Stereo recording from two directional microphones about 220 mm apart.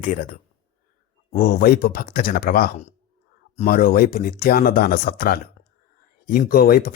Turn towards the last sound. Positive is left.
turn(degrees=45)  # may be behind; listen again after turning